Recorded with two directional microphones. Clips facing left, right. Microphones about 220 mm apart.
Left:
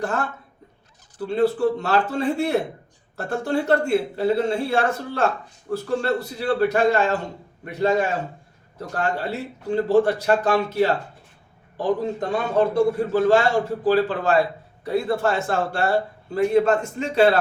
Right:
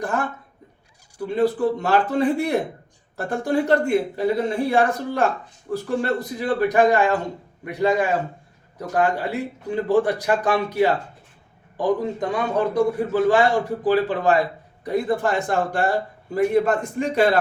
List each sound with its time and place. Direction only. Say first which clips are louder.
0.0 s a man's voice: right 1 dB; 15° right (ahead or behind)